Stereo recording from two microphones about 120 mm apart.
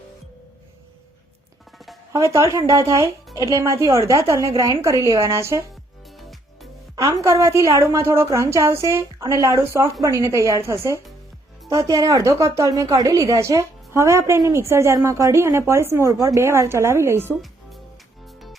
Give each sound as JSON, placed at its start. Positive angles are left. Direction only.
{"t": 2.1, "sound": "speech", "side_deg": -25}
{"t": 6.9, "sound": "speech", "side_deg": -30}